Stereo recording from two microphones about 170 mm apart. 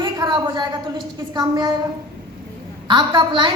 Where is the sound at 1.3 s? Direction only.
25° right (ahead or behind).